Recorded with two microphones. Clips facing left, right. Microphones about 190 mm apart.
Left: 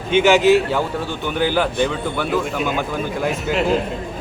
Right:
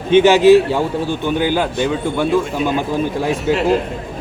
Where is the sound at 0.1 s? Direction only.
15° left (ahead or behind).